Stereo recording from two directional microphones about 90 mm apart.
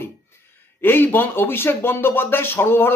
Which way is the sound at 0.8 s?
25° left (ahead or behind).